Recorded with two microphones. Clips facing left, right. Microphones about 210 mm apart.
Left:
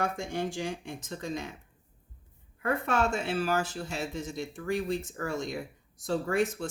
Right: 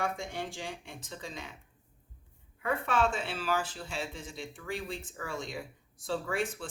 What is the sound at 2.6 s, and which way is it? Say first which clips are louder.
Speech: left 2 dB; 45° left (ahead or behind).